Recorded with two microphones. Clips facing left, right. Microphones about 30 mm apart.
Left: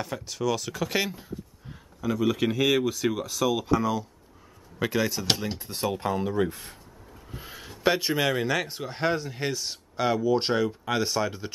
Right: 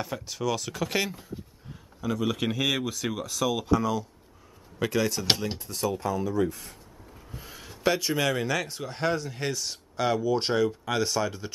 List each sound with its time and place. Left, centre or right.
0.0 s speech: centre
5.7 s speech: left
7.2 s speech: centre